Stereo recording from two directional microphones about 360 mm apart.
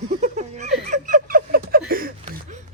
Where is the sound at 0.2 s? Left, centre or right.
Centre.